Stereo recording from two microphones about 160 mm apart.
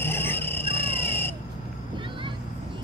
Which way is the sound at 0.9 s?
15° left (ahead or behind).